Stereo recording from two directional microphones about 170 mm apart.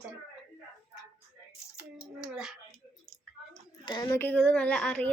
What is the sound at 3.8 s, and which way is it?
A woman's voice, 25° left (ahead or behind).